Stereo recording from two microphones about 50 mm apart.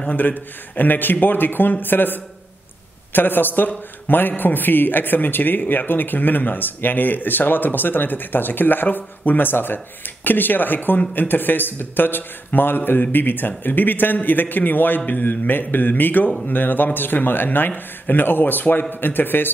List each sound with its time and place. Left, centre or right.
0.1 s speech: left